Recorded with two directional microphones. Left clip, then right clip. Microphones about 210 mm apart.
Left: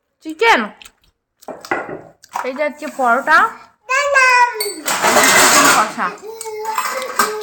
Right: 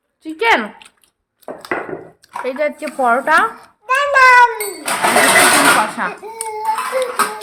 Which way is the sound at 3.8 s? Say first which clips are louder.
Right 2 dB; 20° right (ahead or behind).